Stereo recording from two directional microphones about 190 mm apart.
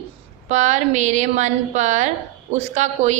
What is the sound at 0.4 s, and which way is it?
A woman's voice, 40° right (ahead or behind).